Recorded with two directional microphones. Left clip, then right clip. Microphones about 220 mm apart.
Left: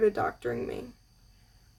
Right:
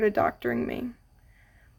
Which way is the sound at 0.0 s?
35° right (ahead or behind).